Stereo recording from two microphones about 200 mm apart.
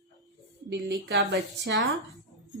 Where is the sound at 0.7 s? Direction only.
55° right (ahead or behind).